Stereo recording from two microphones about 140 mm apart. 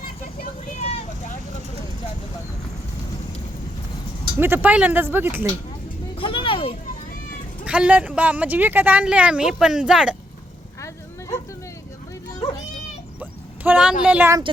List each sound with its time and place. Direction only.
0.8 s vehicle: 50° left (ahead or behind)
4.4 s speech: 15° right (ahead or behind)
6.1 s a sound: 40° left (ahead or behind)
7.6 s speech: 5° right (ahead or behind)
13.7 s speech: 10° right (ahead or behind)